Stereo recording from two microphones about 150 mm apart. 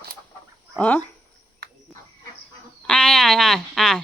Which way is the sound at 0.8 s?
10° left (ahead or behind).